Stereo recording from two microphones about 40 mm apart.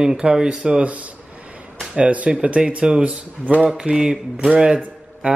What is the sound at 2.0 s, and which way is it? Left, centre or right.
Speech, right.